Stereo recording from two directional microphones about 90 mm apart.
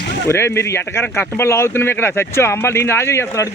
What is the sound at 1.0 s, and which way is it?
Speech, 15° left (ahead or behind).